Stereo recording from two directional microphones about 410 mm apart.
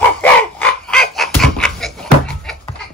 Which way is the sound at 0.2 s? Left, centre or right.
Centre.